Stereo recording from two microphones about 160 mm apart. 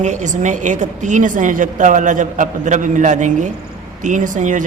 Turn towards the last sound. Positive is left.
turn(degrees=-50)  # may be behind; listen again after turning